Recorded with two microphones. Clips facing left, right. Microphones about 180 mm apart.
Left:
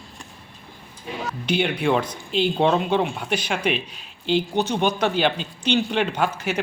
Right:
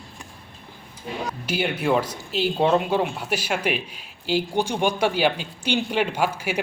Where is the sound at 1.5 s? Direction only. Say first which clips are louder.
Left 2 dB; 5° right (ahead or behind).